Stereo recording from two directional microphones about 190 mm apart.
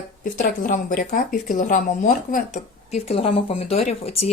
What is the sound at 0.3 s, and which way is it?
A woman's voice, 45° left (ahead or behind).